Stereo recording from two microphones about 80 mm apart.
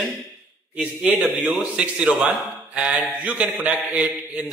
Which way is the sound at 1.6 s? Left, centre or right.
Centre.